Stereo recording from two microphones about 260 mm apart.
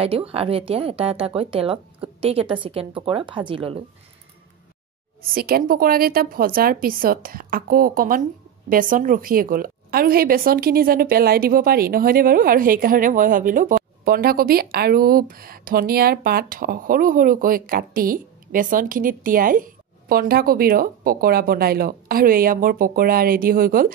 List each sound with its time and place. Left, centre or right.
0.0 s a woman's voice: right
5.3 s speech: right